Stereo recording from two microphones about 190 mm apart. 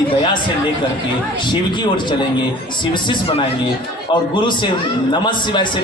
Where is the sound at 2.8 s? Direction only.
25° left (ahead or behind).